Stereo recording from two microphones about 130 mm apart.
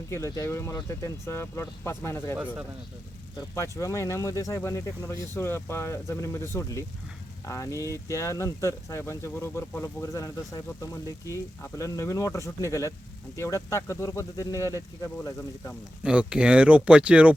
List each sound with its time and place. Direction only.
0.1 s speech: 25° left (ahead or behind)
3.5 s speech: 25° left (ahead or behind)
16.0 s speech: 5° right (ahead or behind)